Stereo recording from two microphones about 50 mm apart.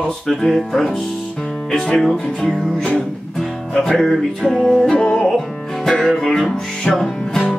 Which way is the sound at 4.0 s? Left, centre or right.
Centre.